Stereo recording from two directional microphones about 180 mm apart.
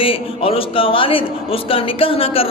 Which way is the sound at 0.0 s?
30° left (ahead or behind).